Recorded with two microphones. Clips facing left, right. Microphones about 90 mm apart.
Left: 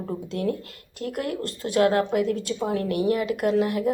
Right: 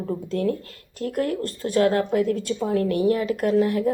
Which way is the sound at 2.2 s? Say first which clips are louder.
Right 2 dB; 40° right (ahead or behind).